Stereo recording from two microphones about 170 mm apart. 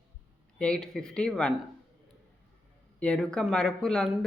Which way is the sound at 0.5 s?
5° left (ahead or behind).